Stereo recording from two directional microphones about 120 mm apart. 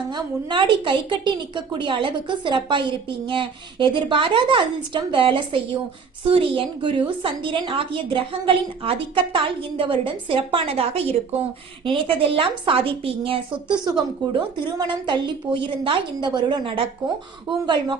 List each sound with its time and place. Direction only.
0.1 s a woman's voice: 40° right (ahead or behind)
13.8 s a woman's voice: 40° right (ahead or behind)